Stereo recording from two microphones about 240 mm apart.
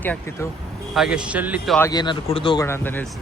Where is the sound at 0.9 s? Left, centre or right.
Centre.